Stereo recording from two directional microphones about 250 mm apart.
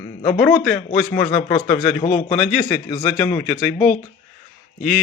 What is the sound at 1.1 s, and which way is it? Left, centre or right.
A man's voice, left.